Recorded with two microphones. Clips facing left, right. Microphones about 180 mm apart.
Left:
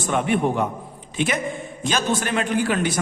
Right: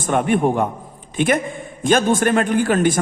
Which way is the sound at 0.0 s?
50° right (ahead or behind).